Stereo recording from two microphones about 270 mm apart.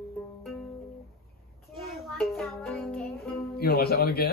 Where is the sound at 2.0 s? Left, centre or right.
Centre.